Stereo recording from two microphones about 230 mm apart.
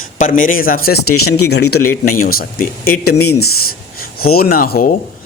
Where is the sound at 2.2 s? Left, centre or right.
Left.